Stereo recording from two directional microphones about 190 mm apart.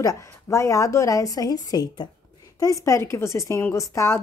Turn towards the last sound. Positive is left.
turn(degrees=15)  # may be behind; listen again after turning